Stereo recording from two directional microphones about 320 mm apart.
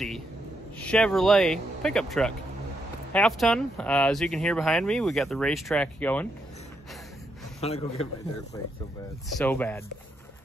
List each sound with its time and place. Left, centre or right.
0.7 s speech: centre
7.6 s a man's voice: centre
9.4 s speech: centre